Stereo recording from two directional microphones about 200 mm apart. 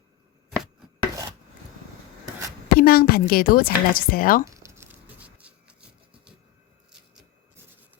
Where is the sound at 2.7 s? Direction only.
50° left (ahead or behind).